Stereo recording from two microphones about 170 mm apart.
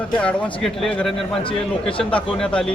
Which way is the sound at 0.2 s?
5° left (ahead or behind).